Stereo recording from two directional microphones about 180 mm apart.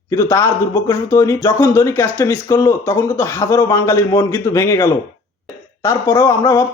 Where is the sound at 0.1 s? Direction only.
15° left (ahead or behind).